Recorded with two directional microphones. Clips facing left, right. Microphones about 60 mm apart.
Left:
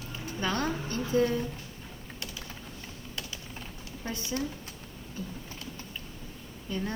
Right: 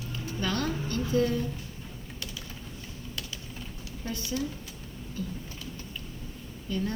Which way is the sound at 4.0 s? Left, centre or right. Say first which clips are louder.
Right 1 dB; left.